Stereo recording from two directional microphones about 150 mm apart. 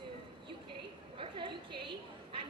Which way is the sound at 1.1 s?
35° right (ahead or behind).